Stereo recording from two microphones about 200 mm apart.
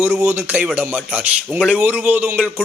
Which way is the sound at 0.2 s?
10° right (ahead or behind).